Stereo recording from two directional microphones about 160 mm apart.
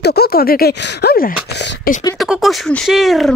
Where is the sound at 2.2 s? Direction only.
Centre (ahead or behind).